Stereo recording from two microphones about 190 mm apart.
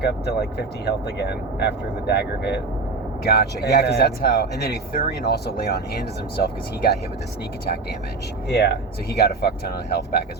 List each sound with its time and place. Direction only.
0.0 s speech: 60° left (ahead or behind)
8.4 s speech: 60° left (ahead or behind)